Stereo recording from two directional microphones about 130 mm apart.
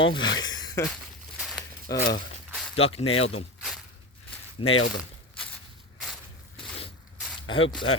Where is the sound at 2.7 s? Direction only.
50° left (ahead or behind).